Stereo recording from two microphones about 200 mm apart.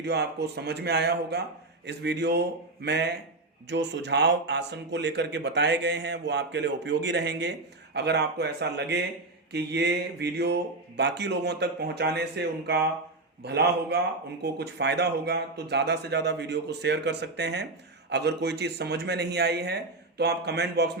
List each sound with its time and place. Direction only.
0.0 s speech: 55° right (ahead or behind)
3.7 s speech: 60° right (ahead or behind)